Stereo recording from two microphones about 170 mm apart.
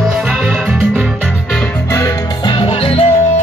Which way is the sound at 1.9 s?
25° left (ahead or behind).